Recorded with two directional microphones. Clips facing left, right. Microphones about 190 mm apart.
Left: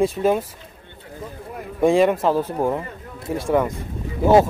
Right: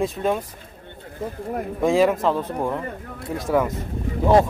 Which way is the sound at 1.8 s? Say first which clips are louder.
Left 2 dB; centre (ahead or behind).